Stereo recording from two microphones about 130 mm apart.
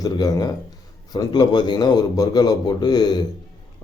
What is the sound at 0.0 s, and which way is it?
A man's voice, 30° left (ahead or behind).